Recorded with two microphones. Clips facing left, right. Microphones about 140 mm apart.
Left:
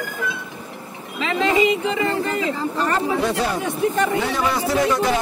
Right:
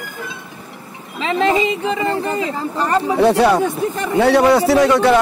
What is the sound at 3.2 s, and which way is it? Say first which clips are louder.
A man's voice: right 9 dB; 70° right (ahead or behind).